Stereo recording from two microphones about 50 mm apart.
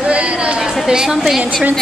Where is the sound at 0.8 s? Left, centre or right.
Centre.